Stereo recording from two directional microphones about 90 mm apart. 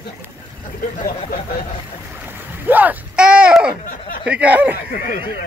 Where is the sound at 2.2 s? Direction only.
20° right (ahead or behind).